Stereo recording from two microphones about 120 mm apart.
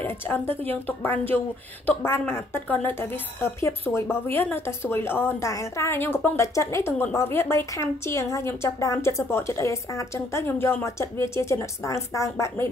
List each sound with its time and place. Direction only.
0.0 s a woman's voice: 15° left (ahead or behind)